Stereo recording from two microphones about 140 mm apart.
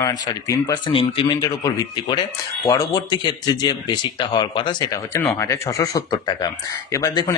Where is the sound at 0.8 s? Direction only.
40° left (ahead or behind).